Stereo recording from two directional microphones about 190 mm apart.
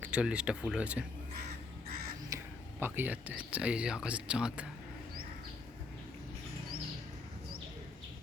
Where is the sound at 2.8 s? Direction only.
10° right (ahead or behind).